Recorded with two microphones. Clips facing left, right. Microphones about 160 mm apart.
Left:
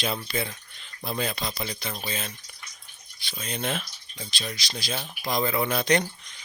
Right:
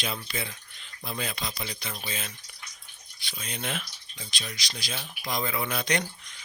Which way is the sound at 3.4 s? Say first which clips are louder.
Left 4 dB; 35° left (ahead or behind).